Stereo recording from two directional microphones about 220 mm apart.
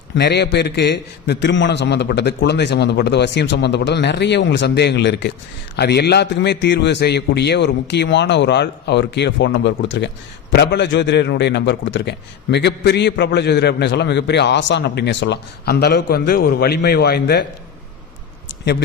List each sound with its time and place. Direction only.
0.2 s a man's voice: 50° left (ahead or behind)